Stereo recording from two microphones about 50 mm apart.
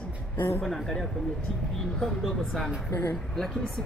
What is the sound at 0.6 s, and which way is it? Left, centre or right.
Speech, centre.